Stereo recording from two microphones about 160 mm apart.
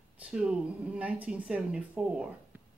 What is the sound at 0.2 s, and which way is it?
Speech, 5° right (ahead or behind).